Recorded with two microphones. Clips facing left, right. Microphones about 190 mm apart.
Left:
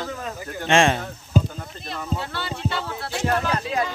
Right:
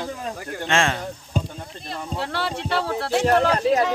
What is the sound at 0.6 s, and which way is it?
Speech, 20° left (ahead or behind).